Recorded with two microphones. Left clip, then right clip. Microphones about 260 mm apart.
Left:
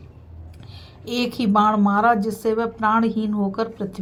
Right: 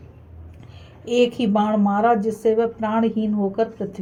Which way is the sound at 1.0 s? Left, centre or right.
Left.